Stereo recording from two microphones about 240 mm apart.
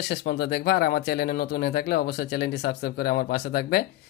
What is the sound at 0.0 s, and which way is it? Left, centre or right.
Speech, left.